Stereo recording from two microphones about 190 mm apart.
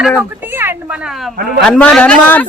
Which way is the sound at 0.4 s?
10° right (ahead or behind).